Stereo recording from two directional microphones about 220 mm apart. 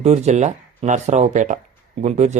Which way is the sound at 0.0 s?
30° right (ahead or behind).